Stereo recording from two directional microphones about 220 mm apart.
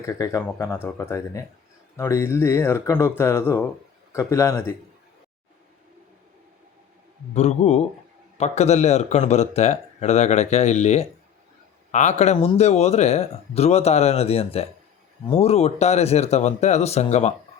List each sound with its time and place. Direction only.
0.0 s speech: 15° left (ahead or behind)
7.3 s speech: 30° left (ahead or behind)